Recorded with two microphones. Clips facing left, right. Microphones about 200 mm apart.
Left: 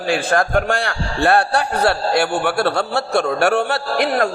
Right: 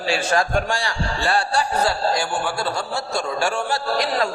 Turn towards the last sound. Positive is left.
turn(degrees=60)  # may be behind; listen again after turning